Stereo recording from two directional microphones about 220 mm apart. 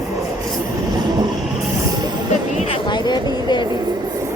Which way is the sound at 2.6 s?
25° left (ahead or behind).